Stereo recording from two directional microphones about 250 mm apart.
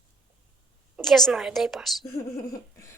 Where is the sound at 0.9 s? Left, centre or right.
Centre.